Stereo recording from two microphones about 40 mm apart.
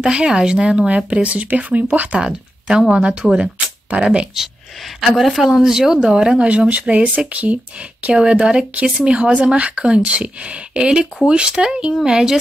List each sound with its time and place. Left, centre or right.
0.0 s speech: right
2.1 s speech: right
3.9 s speech: right
5.1 s speech: centre
6.4 s speech: right
8.1 s speech: right